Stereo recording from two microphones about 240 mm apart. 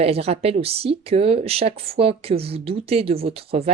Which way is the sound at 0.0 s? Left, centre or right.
Right.